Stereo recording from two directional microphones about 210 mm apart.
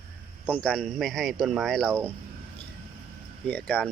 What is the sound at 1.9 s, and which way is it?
Speech, 10° right (ahead or behind).